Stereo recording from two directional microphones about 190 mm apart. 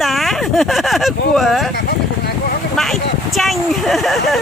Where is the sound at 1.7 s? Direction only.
55° left (ahead or behind).